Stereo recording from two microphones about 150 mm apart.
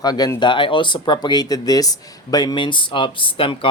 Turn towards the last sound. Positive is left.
turn(degrees=35)  # may be behind; listen again after turning